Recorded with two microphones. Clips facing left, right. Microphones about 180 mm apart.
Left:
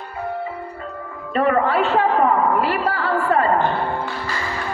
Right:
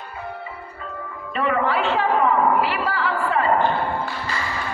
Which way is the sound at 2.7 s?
45° left (ahead or behind).